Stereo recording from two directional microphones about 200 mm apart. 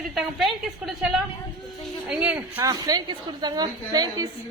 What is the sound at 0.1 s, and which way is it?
Speech, centre (ahead or behind).